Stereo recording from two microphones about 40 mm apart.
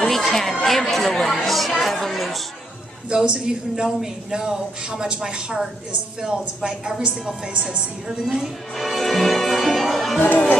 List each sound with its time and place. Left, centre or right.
0.1 s chatter: centre
3.1 s speech: centre
8.7 s music: centre